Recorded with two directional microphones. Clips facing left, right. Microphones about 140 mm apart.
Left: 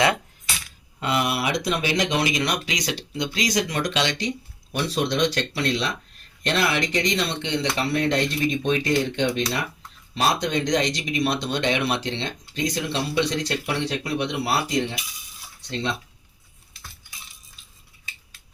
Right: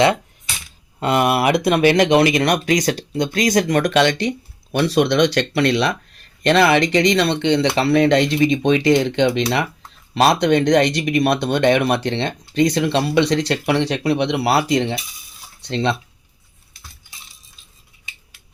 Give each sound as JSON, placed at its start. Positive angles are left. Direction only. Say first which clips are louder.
{"t": 0.9, "sound": "speech", "louder": "right 7 dB", "side_deg": -45}
{"t": 10.2, "sound": "speech", "louder": "right 8 dB", "side_deg": -70}